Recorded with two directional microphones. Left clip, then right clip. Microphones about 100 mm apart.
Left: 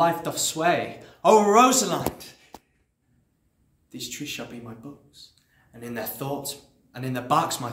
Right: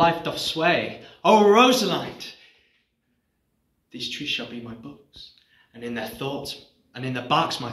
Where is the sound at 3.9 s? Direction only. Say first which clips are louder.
Right 6 dB; 35° left (ahead or behind).